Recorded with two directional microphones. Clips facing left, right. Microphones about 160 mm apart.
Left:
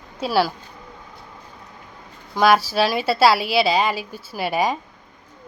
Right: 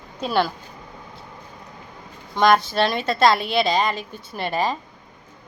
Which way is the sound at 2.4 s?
5° left (ahead or behind).